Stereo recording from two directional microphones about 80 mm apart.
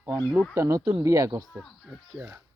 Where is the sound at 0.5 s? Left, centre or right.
Right.